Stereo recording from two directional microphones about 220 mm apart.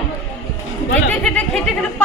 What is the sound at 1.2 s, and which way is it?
Speech, 5° left (ahead or behind).